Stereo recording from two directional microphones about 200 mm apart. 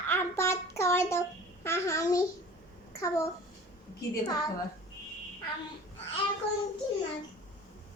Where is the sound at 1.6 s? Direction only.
15° left (ahead or behind).